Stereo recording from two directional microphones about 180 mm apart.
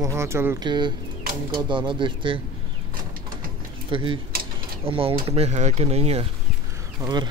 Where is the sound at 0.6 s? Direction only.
25° right (ahead or behind).